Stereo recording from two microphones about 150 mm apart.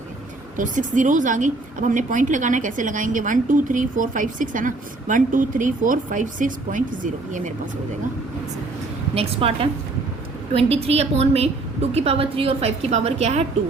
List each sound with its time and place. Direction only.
0.5 s a woman's voice: 60° right (ahead or behind)
9.1 s a woman's voice: 40° right (ahead or behind)